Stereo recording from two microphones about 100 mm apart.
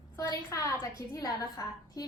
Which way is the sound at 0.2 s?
30° left (ahead or behind).